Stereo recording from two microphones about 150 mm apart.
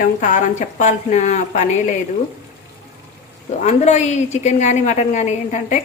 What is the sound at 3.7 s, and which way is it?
A woman's voice, 50° left (ahead or behind).